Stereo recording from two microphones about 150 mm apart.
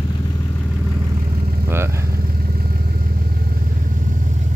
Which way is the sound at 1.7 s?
15° right (ahead or behind).